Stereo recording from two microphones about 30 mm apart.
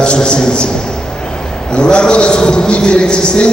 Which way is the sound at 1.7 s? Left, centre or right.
Left.